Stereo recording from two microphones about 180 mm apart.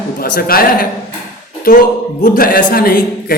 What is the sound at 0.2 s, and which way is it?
Speech, 55° left (ahead or behind).